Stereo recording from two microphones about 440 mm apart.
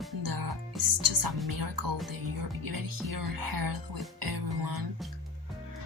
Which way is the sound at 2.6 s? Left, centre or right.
Right.